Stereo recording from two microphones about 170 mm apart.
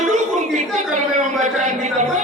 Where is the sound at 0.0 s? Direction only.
45° right (ahead or behind).